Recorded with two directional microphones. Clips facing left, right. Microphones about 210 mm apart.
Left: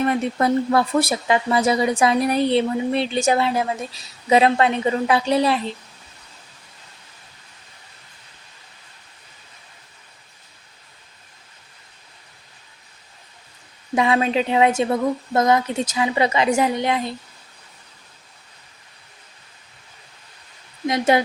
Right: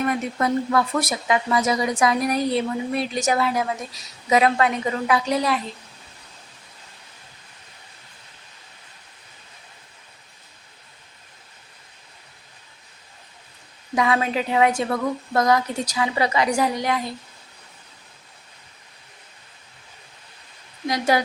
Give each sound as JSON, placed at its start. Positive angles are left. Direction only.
{"t": 0.0, "sound": "a woman's voice", "side_deg": 30}
{"t": 13.9, "sound": "a woman's voice", "side_deg": 25}
{"t": 20.8, "sound": "a woman's voice", "side_deg": 25}